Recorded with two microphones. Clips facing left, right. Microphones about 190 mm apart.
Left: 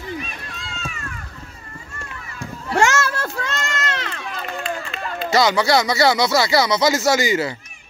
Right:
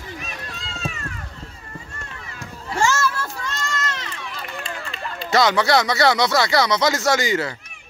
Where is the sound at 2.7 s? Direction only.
75° left (ahead or behind).